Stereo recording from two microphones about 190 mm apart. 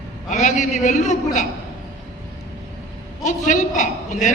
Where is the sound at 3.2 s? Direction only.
40° left (ahead or behind).